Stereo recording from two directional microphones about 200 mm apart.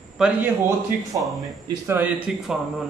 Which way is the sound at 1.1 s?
15° right (ahead or behind).